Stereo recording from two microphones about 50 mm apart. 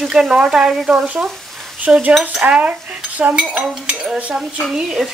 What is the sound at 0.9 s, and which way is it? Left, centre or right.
Cutlery, right.